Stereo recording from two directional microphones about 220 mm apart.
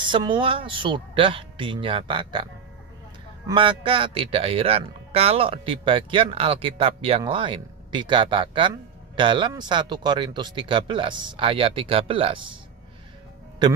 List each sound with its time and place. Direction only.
0.0 s speech: 20° right (ahead or behind)